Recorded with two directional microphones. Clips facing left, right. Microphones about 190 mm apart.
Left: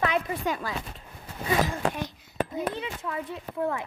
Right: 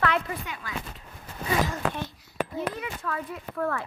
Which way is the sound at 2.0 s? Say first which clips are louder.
Left 1 dB; 25° left (ahead or behind).